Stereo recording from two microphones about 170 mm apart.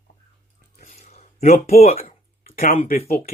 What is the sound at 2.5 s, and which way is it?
Speech, 55° left (ahead or behind).